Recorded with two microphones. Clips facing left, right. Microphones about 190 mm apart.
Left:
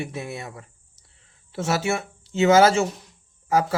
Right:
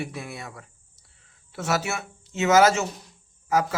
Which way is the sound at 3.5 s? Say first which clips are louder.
Left 2 dB; 30° left (ahead or behind).